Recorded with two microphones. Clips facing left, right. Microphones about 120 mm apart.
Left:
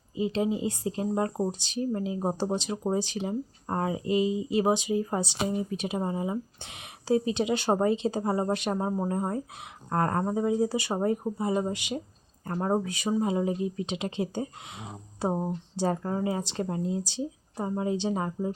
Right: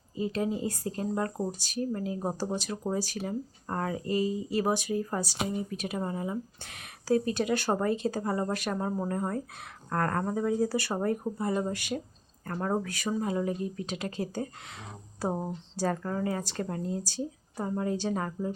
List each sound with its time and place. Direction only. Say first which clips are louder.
0.2 s a woman's voice: left 3 dB; 15° left (ahead or behind)